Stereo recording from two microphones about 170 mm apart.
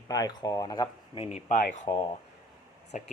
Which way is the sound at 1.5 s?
50° left (ahead or behind).